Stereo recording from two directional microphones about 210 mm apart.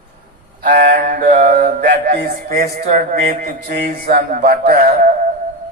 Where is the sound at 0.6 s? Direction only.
45° right (ahead or behind).